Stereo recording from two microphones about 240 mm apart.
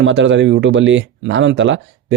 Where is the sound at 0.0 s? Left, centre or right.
Right.